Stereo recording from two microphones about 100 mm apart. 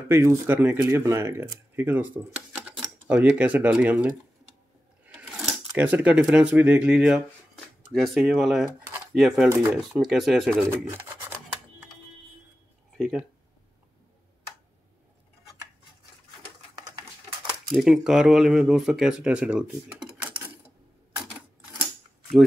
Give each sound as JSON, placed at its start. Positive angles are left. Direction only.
{"t": 0.1, "sound": "speech", "side_deg": -25}
{"t": 5.0, "sound": "sewing machine", "side_deg": -15}
{"t": 5.4, "sound": "a sound", "side_deg": 0}
{"t": 5.8, "sound": "speech", "side_deg": -15}
{"t": 7.9, "sound": "speech", "side_deg": 0}
{"t": 10.7, "sound": "speech", "side_deg": -25}
{"t": 12.9, "sound": "speech", "side_deg": 5}
{"t": 17.7, "sound": "speech", "side_deg": -5}